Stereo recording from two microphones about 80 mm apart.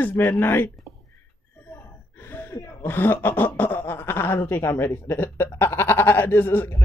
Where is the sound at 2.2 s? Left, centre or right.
Left.